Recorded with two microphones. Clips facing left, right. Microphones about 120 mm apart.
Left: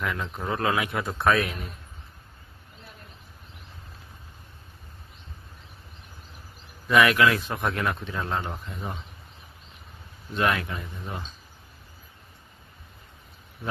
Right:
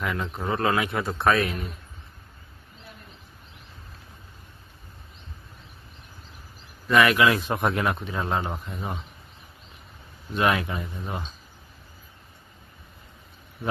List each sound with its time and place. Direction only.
0.0 s a man's voice: 5° right (ahead or behind)
6.8 s a man's voice: centre (ahead or behind)
7.3 s speech: 20° right (ahead or behind)
10.3 s speech: 15° right (ahead or behind)